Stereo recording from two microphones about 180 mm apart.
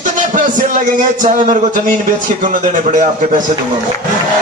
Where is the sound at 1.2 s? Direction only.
45° right (ahead or behind).